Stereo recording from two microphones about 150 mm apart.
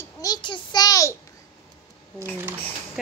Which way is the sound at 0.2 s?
30° left (ahead or behind).